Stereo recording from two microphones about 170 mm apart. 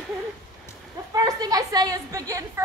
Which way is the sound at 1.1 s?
20° right (ahead or behind).